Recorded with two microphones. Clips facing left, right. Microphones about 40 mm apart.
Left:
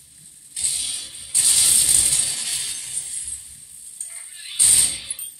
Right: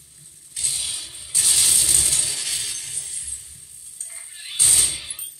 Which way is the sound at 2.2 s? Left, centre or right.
Centre.